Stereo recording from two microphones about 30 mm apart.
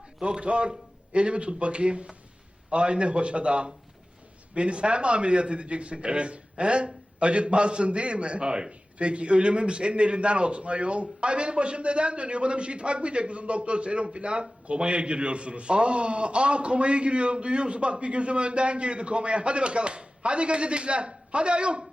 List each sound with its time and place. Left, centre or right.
0.2 s a man's voice: right